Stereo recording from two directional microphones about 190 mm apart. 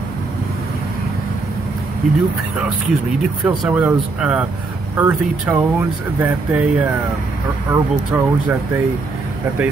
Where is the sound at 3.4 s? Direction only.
10° right (ahead or behind).